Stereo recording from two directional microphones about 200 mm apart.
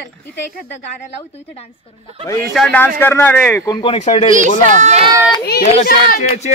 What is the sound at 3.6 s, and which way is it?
Speech, 25° left (ahead or behind).